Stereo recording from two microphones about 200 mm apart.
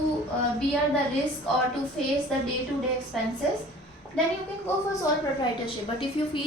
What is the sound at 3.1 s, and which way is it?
Speech, centre (ahead or behind).